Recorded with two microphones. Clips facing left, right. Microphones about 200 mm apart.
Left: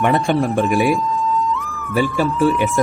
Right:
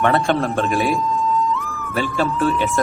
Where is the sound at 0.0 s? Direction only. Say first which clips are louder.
Left 1 dB; 15° left (ahead or behind).